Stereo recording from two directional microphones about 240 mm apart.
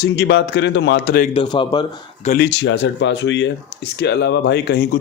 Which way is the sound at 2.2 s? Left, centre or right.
Left.